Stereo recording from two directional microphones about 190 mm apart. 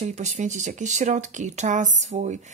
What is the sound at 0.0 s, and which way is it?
Speech, 35° right (ahead or behind).